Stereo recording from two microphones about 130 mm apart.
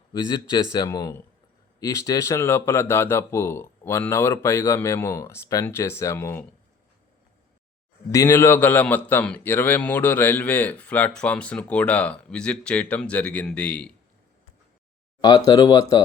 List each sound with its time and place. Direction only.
0.1 s a man's voice: 30° left (ahead or behind)
8.1 s a man's voice: 20° left (ahead or behind)
15.2 s a man's voice: 30° left (ahead or behind)